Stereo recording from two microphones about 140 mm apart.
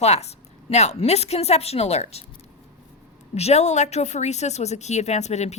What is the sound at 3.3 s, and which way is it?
Speech, 50° left (ahead or behind).